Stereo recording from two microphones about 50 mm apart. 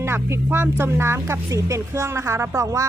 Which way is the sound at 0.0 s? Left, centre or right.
Right.